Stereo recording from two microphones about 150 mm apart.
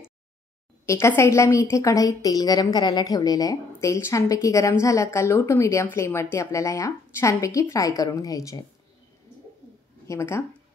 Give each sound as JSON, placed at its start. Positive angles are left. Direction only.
{"t": 0.8, "sound": "a woman's voice", "side_deg": 20}
{"t": 10.0, "sound": "speech", "side_deg": 20}